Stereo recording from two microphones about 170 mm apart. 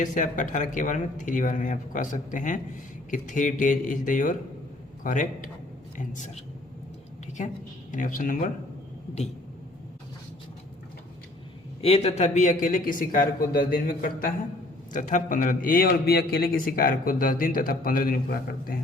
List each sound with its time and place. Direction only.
0.0 s a man's voice: 50° left (ahead or behind)
11.8 s a man's voice: 35° left (ahead or behind); by 18.8 s 60° left (ahead or behind)